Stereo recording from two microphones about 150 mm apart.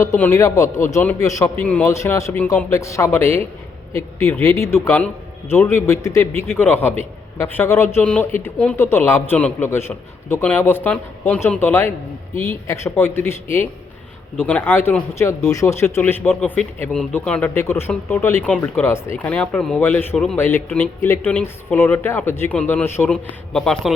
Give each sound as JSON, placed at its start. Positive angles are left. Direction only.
{"t": 0.0, "sound": "a man's voice", "side_deg": 15}